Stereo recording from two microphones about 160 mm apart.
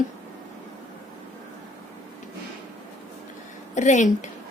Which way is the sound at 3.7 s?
50° left (ahead or behind).